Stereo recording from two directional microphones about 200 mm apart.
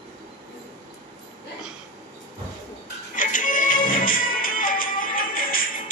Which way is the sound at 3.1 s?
40° left (ahead or behind).